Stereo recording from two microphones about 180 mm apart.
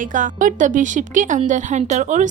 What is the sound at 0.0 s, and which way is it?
A woman's voice, 45° right (ahead or behind).